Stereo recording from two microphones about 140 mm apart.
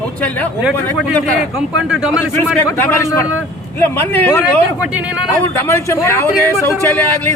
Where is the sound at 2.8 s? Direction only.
20° left (ahead or behind).